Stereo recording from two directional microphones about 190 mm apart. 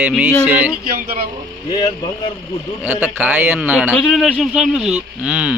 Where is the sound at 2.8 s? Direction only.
10° right (ahead or behind).